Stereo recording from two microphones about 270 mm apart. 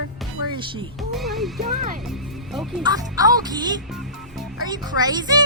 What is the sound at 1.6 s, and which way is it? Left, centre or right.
Speech, right.